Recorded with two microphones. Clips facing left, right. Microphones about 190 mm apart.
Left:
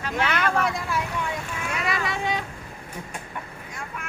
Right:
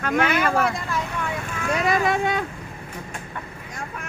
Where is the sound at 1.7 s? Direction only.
40° right (ahead or behind).